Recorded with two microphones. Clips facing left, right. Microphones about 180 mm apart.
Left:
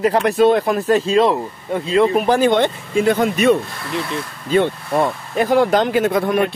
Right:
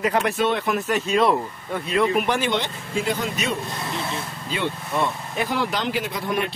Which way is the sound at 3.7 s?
20° right (ahead or behind).